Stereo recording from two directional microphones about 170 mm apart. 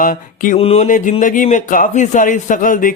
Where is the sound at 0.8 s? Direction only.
50° left (ahead or behind).